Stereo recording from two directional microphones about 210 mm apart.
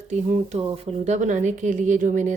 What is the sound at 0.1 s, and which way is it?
A woman's voice, 35° right (ahead or behind).